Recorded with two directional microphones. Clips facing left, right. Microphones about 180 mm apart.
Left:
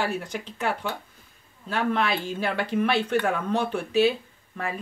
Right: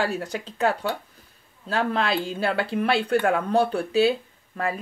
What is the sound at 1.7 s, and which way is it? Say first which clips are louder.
Speech: right 1 dB; 35° right (ahead or behind).